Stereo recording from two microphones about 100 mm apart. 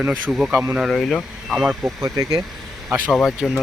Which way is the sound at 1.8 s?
35° right (ahead or behind).